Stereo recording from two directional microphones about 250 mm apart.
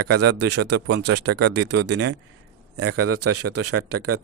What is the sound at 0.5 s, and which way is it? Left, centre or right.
Speech, right.